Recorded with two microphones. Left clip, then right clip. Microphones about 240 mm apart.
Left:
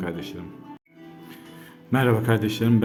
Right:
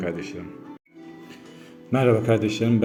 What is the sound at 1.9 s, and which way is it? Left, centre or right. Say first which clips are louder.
Speech: right 2 dB; centre.